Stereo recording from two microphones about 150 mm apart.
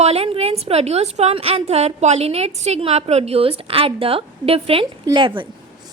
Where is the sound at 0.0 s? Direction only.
45° right (ahead or behind).